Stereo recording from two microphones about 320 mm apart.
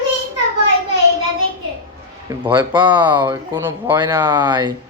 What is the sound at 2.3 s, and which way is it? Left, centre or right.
Speech, centre.